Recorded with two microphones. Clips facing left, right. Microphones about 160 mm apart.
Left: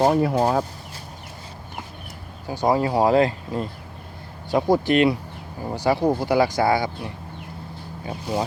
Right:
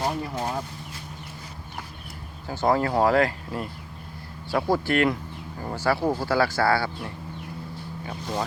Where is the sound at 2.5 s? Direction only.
15° left (ahead or behind).